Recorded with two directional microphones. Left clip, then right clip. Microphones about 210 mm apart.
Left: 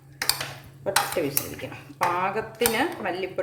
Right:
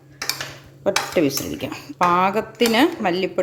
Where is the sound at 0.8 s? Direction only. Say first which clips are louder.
Right 5 dB; 55° right (ahead or behind).